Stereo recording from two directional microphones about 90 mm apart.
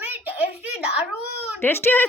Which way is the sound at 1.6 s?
25° left (ahead or behind).